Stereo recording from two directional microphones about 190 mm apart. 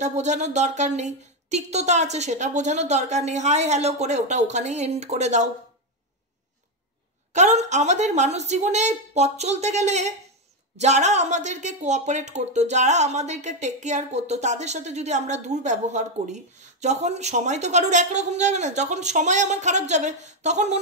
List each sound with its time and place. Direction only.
0.0 s speech: 40° right (ahead or behind)
7.3 s speech: 40° right (ahead or behind)